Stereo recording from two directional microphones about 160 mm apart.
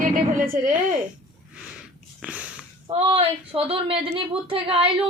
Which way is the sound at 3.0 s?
35° right (ahead or behind).